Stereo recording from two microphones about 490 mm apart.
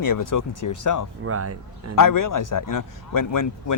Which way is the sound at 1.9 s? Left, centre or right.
Left.